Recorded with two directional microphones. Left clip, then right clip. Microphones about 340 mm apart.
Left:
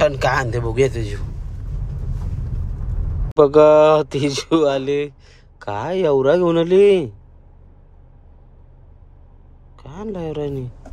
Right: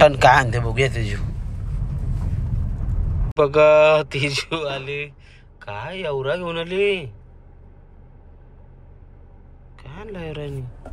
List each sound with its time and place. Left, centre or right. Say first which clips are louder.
0.0 s a man's voice: right 5 dB; centre
3.3 s speech: left 3 dB; centre
9.8 s speech: left 6 dB; centre